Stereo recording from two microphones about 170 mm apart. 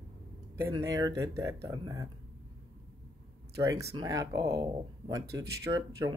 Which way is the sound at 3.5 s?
20° right (ahead or behind).